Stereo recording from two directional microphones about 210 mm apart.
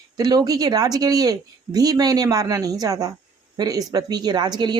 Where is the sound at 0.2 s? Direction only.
20° right (ahead or behind).